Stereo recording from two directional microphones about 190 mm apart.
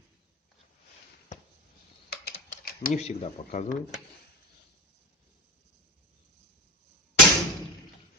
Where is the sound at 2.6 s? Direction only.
40° left (ahead or behind).